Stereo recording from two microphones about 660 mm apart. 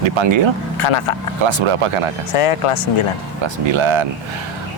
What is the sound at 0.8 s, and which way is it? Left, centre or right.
Speech, left.